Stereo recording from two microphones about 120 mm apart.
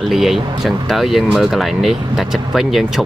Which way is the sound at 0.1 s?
Centre (ahead or behind).